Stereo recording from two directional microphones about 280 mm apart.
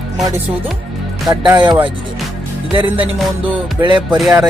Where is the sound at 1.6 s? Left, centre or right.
Centre.